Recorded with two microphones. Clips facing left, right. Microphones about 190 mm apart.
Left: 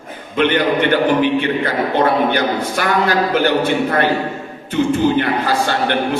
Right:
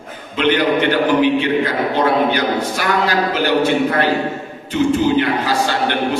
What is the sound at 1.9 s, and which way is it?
A man's voice, 55° left (ahead or behind).